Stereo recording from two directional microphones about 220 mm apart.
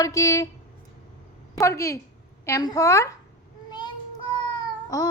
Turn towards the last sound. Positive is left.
turn(degrees=15)  # may be behind; listen again after turning